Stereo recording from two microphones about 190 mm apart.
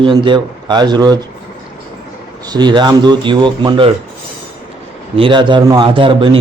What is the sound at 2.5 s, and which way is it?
A man's voice, 25° right (ahead or behind).